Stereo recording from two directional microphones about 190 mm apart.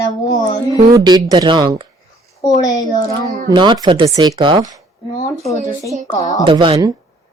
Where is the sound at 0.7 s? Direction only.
20° right (ahead or behind).